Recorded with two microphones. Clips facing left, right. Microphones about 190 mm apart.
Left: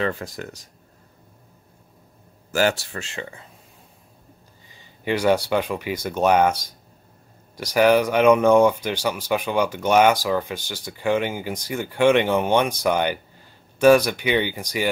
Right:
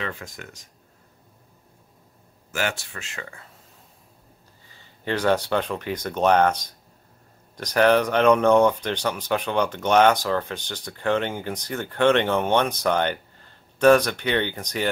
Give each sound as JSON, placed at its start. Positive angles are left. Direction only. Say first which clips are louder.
{"t": 0.0, "sound": "speech", "louder": "left 7 dB", "side_deg": 35}
{"t": 2.5, "sound": "speech", "louder": "left 7 dB", "side_deg": 35}
{"t": 4.7, "sound": "speech", "louder": "left 3 dB", "side_deg": 10}